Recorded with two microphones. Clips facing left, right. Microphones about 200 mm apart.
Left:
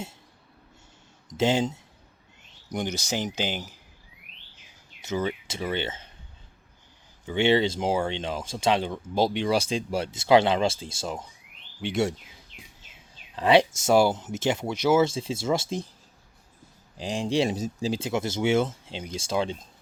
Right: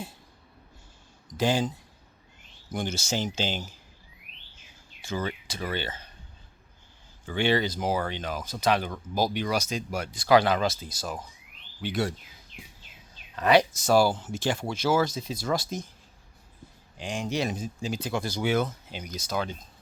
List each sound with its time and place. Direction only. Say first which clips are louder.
1.3 s speech: left 2 dB; 25° left (ahead or behind)
5.0 s speech: left 4 dB; 20° left (ahead or behind)
7.3 s speech: left 4 dB; 25° left (ahead or behind)
13.3 s speech: left 2 dB; 30° left (ahead or behind)
17.0 s a man's voice: left 4 dB; 35° left (ahead or behind)